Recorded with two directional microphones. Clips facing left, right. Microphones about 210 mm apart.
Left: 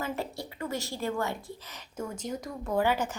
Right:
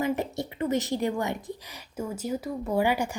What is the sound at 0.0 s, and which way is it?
A woman's voice, 20° right (ahead or behind).